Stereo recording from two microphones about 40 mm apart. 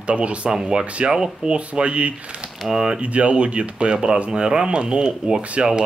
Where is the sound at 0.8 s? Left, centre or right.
Right.